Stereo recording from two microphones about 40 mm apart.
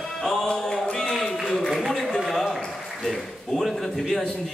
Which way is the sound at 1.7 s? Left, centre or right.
Centre.